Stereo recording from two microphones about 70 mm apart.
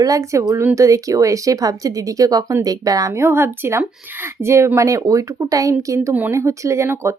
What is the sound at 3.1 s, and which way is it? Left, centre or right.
Speech, right.